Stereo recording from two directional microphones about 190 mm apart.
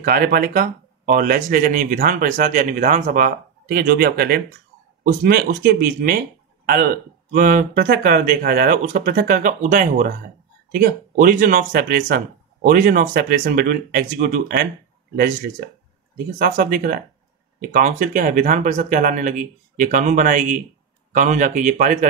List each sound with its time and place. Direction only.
0.0 s speech: 50° right (ahead or behind)